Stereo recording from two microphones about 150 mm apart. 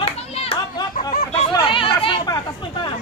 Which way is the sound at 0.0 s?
40° left (ahead or behind).